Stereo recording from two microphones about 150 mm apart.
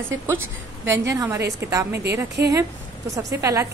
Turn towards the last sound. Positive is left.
turn(degrees=-20)  # may be behind; listen again after turning